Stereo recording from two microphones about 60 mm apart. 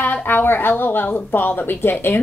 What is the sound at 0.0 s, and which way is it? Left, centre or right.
Speech, left.